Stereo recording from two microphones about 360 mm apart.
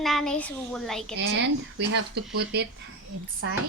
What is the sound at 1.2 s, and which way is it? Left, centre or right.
Speech, right.